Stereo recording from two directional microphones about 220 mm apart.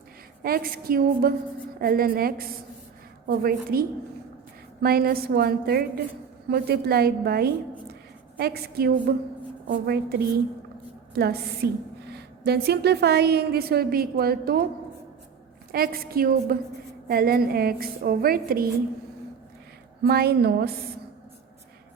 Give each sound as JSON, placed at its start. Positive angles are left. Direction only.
{"t": 0.4, "sound": "a woman's voice", "side_deg": -40}
{"t": 15.7, "sound": "a woman's voice", "side_deg": -45}
{"t": 20.1, "sound": "a woman's voice", "side_deg": -45}